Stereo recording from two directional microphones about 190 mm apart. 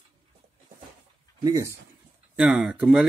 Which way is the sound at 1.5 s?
15° right (ahead or behind).